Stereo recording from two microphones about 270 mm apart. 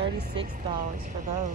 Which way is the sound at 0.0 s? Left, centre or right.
Right.